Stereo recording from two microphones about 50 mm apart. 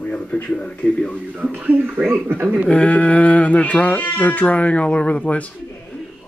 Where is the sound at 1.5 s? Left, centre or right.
Right.